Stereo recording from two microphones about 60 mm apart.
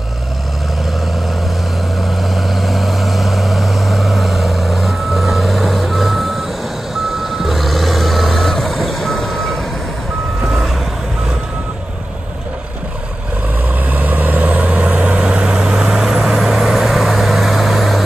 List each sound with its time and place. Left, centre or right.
2.0 s vehicle: centre
13.8 s vehicle: right
15.0 s vehicle: centre